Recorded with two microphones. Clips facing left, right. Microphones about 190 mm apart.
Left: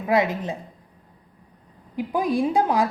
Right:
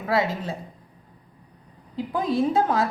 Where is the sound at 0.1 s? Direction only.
15° left (ahead or behind).